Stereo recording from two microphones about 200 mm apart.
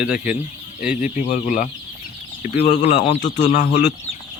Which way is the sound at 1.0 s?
40° left (ahead or behind).